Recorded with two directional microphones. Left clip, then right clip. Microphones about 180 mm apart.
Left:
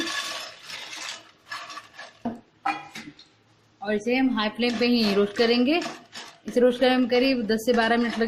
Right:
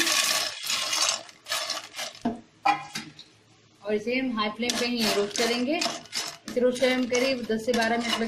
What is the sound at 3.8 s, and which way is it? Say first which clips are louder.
Speech: left 3 dB; 50° left (ahead or behind).